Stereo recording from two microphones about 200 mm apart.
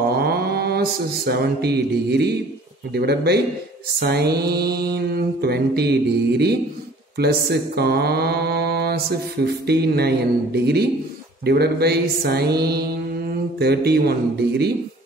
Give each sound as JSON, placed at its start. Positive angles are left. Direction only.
{"t": 0.1, "sound": "mantra", "side_deg": -50}
{"t": 13.3, "sound": "speech", "side_deg": -50}